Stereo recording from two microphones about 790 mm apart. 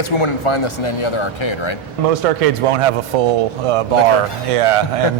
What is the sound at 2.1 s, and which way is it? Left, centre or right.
Speech, right.